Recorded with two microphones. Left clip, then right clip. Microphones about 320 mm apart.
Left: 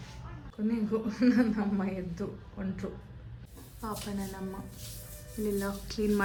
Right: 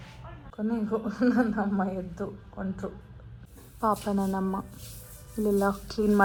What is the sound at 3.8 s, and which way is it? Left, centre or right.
Speech, centre.